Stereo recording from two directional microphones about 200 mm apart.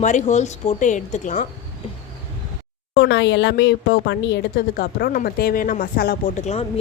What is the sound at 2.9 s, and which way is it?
Speech, 60° left (ahead or behind).